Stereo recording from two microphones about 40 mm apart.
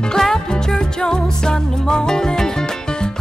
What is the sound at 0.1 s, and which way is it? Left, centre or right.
Music, centre.